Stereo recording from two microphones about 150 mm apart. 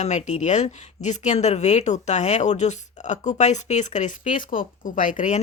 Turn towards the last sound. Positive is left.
turn(degrees=55)  # may be behind; listen again after turning